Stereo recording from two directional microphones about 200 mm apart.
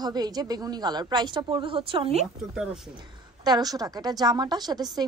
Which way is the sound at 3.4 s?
20° right (ahead or behind).